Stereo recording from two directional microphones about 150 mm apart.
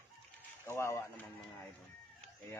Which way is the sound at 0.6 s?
20° left (ahead or behind).